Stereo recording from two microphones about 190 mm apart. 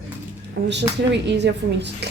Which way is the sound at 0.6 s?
65° right (ahead or behind).